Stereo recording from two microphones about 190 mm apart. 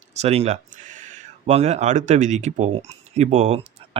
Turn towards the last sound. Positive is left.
turn(degrees=-30)  # may be behind; listen again after turning